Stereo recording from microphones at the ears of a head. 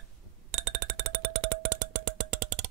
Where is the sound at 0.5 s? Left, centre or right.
Right.